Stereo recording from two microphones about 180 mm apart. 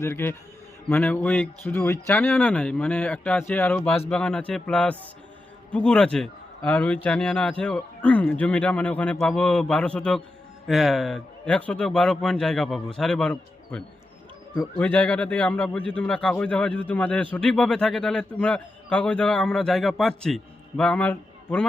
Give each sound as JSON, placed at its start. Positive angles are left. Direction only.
{"t": 0.0, "sound": "speech", "side_deg": 15}
{"t": 1.7, "sound": "a man's voice", "side_deg": 15}